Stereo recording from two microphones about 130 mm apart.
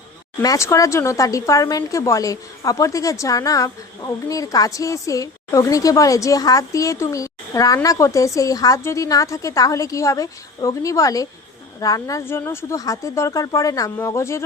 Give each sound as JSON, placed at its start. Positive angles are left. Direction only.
{"t": 0.4, "sound": "speech", "side_deg": 25}